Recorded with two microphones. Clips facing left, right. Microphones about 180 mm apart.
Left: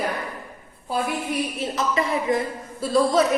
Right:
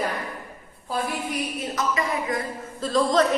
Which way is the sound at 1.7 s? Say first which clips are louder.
Left 2 dB; 30° left (ahead or behind).